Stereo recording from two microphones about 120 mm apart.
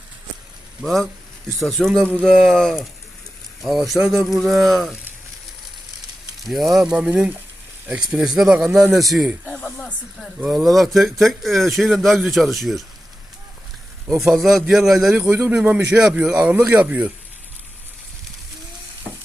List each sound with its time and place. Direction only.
0.8 s speech: centre (ahead or behind)
6.4 s speech: centre (ahead or behind)
9.5 s snake: 5° left (ahead or behind)
10.4 s speech: 5° right (ahead or behind)
14.2 s speech: centre (ahead or behind)
15.2 s speech: 20° right (ahead or behind)
15.5 s speech: 10° right (ahead or behind)